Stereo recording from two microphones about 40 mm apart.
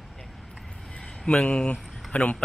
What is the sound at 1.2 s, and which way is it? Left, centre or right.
Speech, left.